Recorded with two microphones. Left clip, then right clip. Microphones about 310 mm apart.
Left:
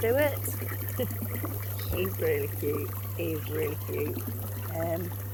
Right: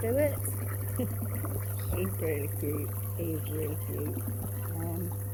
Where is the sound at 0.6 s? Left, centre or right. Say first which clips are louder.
Left 4 dB; left.